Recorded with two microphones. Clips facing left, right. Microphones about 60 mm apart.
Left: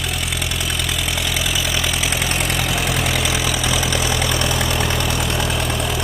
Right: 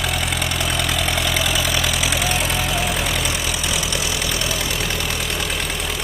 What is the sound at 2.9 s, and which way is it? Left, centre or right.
Vehicle, left.